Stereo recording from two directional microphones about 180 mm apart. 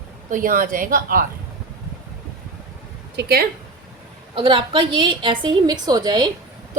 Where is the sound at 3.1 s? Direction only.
65° right (ahead or behind).